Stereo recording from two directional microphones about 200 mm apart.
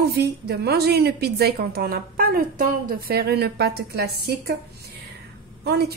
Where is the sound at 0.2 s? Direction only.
55° right (ahead or behind).